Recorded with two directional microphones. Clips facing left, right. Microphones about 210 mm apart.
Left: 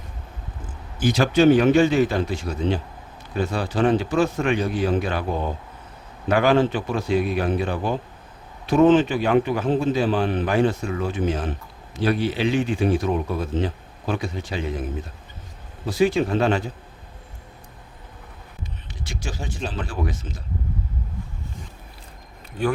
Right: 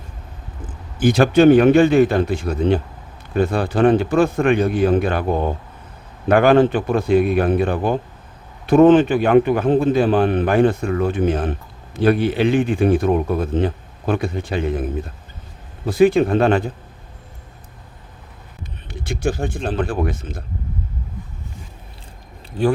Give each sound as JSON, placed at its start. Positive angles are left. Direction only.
{"t": 0.9, "sound": "a man's voice", "side_deg": -55}
{"t": 15.9, "sound": "a man's voice", "side_deg": -55}
{"t": 18.9, "sound": "a man's voice", "side_deg": -55}
{"t": 22.5, "sound": "speech", "side_deg": -30}